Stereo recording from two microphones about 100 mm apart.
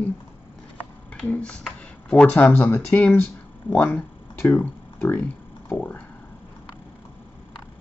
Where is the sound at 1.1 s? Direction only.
10° left (ahead or behind).